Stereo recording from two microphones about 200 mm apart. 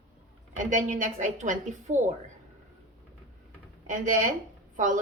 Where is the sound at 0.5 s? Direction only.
40° right (ahead or behind).